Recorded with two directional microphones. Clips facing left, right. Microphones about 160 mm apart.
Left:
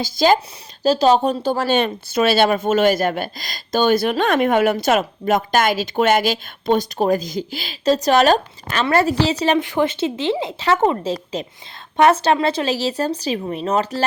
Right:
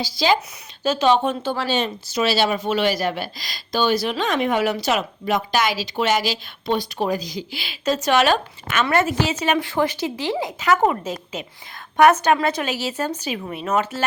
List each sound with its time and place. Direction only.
0.0 s speech: 45° left (ahead or behind)
0.8 s speech: 35° left (ahead or behind)
9.6 s a woman's voice: 20° left (ahead or behind)